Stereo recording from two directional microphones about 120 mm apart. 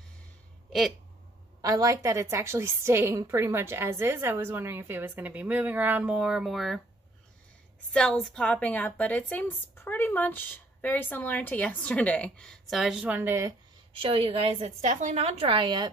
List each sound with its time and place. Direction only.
0.7 s speech: centre (ahead or behind)
1.6 s a woman's voice: 30° right (ahead or behind); by 6.8 s centre (ahead or behind)
7.9 s a woman's voice: 5° left (ahead or behind); by 13.5 s 15° right (ahead or behind)
13.9 s a woman's voice: 50° right (ahead or behind)